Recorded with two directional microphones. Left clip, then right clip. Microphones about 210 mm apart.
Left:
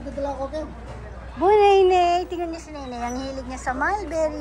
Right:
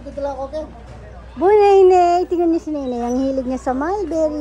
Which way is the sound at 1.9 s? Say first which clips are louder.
Right 6 dB; 50° right (ahead or behind).